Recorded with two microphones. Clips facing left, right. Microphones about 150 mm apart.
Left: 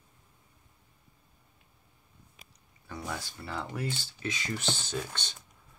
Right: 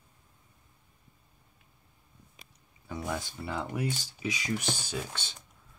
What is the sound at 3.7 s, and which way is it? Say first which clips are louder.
Speech: right 2 dB; 15° right (ahead or behind).